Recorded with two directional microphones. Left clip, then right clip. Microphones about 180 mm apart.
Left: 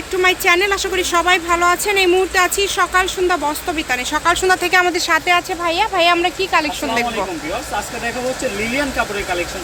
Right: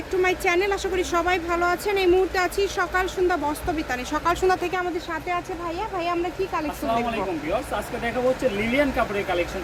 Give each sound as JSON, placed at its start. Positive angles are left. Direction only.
{"t": 0.2, "sound": "speech", "side_deg": 0}
{"t": 4.7, "sound": "speech", "side_deg": 20}